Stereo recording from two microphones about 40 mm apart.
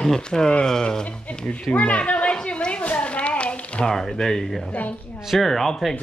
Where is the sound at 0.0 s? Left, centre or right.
Centre.